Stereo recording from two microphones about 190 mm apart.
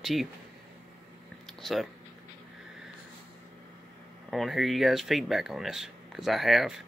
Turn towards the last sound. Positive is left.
turn(degrees=0)  # may be behind; listen again after turning